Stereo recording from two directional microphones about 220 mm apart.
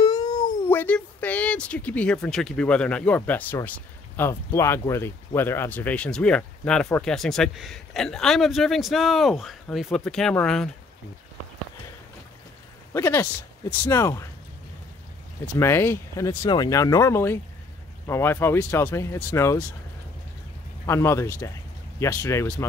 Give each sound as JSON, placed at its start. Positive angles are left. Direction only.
{"t": 0.0, "sound": "cat", "side_deg": 15}
{"t": 0.7, "sound": "speech", "side_deg": 5}
{"t": 12.9, "sound": "speech", "side_deg": 15}
{"t": 15.6, "sound": "speech", "side_deg": 10}
{"t": 20.8, "sound": "speech", "side_deg": 10}